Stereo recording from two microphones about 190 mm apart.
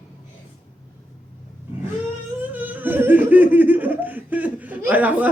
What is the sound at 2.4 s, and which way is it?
Laughter, 10° right (ahead or behind).